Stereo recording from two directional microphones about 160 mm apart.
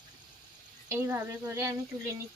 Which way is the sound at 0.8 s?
15° right (ahead or behind).